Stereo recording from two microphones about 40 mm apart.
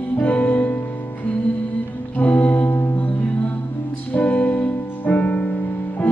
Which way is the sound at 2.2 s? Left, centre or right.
Left.